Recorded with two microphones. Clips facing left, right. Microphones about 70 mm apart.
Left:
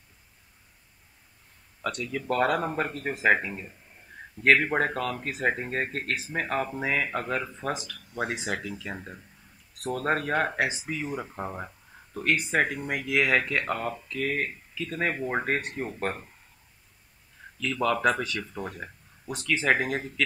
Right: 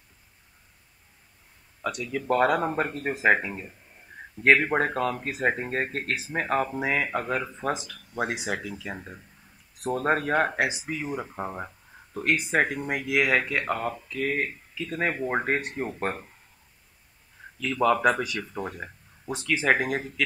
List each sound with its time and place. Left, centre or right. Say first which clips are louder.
1.8 s speech: right 1 dB; centre
4.9 s speech: right 3 dB; right
5.4 s speech: right 1 dB; centre
9.8 s speech: right 2 dB; centre
17.6 s speech: right 3 dB; centre